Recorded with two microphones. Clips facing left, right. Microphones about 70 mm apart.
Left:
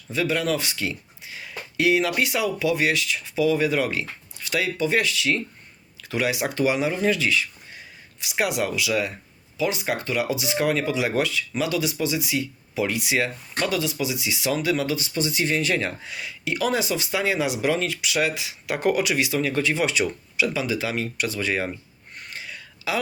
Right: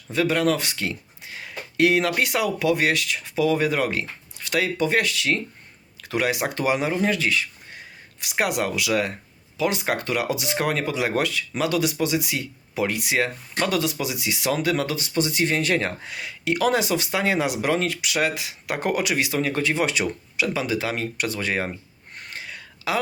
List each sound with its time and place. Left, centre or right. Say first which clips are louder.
0.1 s speech: right 3 dB; right
13.7 s speech: even; right
22.3 s a sound: right 1 dB; right